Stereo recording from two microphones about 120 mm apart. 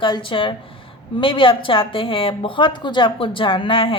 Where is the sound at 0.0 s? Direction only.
45° left (ahead or behind).